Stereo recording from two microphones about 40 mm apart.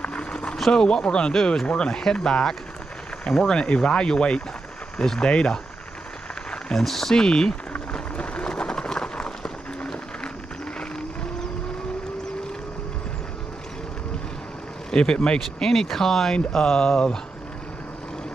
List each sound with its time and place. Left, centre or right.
0.0 s a sound: left
0.7 s speech: left
6.7 s speech: centre
7.2 s speech: centre
7.9 s a sound: left
14.9 s speech: left
15.3 s speech: centre